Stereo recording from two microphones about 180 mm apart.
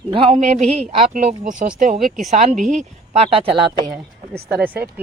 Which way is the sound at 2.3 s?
40° right (ahead or behind).